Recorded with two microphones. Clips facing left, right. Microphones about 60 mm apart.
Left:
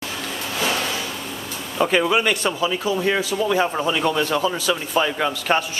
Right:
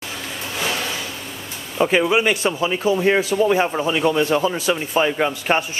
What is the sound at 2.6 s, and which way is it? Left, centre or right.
Speech, right.